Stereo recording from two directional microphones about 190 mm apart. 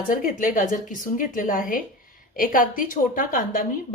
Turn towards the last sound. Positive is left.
turn(degrees=45)  # may be behind; listen again after turning